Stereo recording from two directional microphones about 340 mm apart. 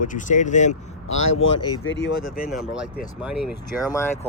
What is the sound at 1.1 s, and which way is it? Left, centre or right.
Speech, left.